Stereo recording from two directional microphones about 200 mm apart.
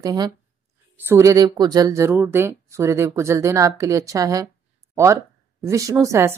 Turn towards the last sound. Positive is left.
turn(degrees=-15)  # may be behind; listen again after turning